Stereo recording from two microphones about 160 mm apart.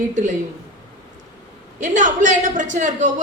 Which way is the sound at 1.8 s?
50° right (ahead or behind).